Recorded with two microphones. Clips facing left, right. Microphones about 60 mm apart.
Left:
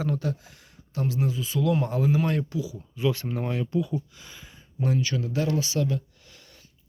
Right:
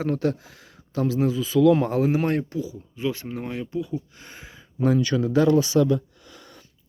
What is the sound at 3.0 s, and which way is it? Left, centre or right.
Speech, right.